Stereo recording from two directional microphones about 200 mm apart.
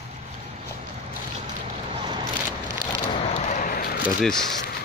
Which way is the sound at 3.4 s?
40° left (ahead or behind).